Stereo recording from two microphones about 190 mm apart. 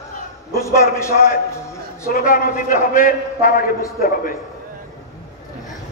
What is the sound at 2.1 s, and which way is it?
A man's voice, 45° left (ahead or behind).